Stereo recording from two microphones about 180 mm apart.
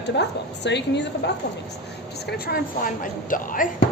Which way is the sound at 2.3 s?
60° left (ahead or behind).